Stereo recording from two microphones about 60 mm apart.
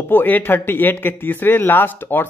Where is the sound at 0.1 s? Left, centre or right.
Left.